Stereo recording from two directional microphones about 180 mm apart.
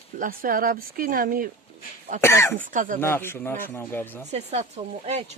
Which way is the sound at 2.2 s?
15° left (ahead or behind).